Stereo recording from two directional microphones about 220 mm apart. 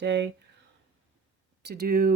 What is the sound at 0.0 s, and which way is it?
Speech, 55° right (ahead or behind).